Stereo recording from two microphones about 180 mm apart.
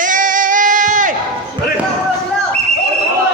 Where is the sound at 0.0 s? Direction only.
45° right (ahead or behind).